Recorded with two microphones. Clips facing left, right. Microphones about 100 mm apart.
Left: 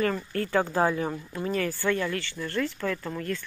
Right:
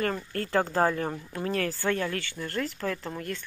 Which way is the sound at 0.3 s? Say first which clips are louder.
Left 1 dB; 40° right (ahead or behind).